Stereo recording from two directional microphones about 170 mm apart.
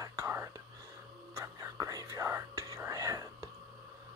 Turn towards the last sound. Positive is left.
turn(degrees=-20)  # may be behind; listen again after turning